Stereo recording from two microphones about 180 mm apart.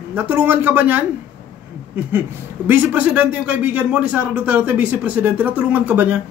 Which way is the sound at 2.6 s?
10° right (ahead or behind).